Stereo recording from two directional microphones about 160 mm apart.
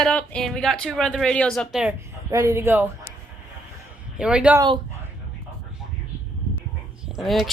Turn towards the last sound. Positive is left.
turn(degrees=0)  # may be behind; listen again after turning